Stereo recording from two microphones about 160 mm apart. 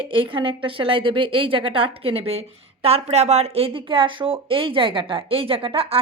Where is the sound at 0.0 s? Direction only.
30° right (ahead or behind).